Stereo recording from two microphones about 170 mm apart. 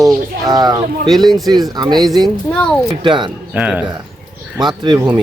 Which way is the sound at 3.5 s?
10° right (ahead or behind).